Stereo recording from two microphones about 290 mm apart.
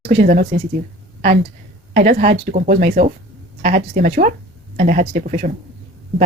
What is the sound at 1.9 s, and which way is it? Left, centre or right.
Speech, right.